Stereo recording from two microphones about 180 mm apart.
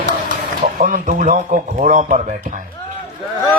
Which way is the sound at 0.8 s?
45° right (ahead or behind).